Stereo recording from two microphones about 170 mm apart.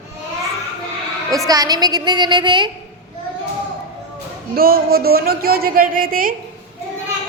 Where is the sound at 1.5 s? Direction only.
20° right (ahead or behind).